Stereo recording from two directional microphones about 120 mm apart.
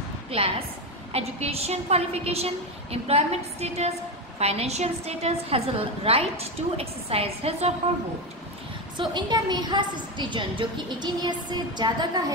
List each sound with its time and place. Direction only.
0.3 s a woman's voice: 55° right (ahead or behind)
8.9 s a woman's voice: 40° right (ahead or behind)